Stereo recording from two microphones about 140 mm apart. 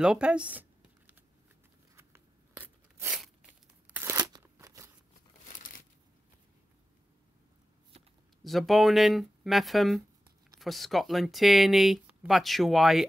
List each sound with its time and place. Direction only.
0.0 s a sound: 5° right (ahead or behind)
2.0 s biting: 15° right (ahead or behind)
3.9 s crunch: 15° right (ahead or behind)
8.5 s speech: centre (ahead or behind)